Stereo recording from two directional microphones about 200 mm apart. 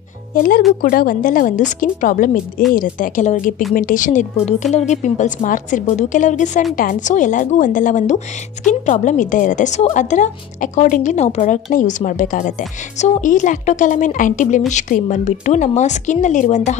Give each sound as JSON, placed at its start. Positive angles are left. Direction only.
{"t": 0.3, "sound": "a woman's voice", "side_deg": 45}